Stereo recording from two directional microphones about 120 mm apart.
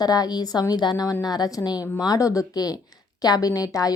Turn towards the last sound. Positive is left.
turn(degrees=30)  # may be behind; listen again after turning